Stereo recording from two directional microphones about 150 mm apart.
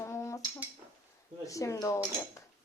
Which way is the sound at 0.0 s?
20° left (ahead or behind).